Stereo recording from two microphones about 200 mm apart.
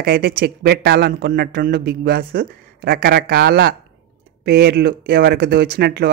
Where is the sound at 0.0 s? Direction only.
50° right (ahead or behind).